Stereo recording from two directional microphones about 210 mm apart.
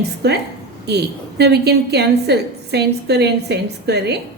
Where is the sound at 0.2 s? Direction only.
50° right (ahead or behind).